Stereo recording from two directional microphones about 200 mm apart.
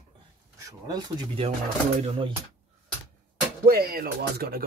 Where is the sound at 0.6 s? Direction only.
15° right (ahead or behind).